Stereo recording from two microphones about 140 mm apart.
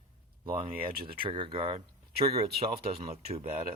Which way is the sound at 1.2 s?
40° right (ahead or behind).